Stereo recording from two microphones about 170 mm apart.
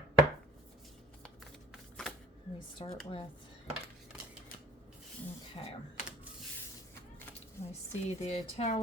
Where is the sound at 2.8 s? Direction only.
30° left (ahead or behind).